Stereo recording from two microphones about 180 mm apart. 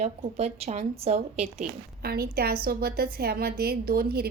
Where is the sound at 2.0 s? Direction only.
60° right (ahead or behind).